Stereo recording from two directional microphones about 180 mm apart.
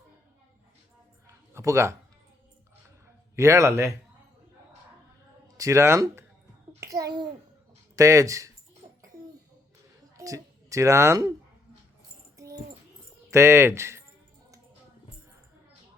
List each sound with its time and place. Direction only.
1.5 s speech: 15° right (ahead or behind)
3.3 s speech: 15° right (ahead or behind)
5.5 s a child's voice: 15° right (ahead or behind)
8.8 s a sound: 35° right (ahead or behind)
10.2 s a child's voice: 20° right (ahead or behind)
13.3 s speech: 15° right (ahead or behind)